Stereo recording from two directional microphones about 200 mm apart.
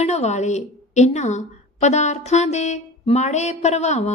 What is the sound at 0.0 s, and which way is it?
A woman's voice, 35° left (ahead or behind).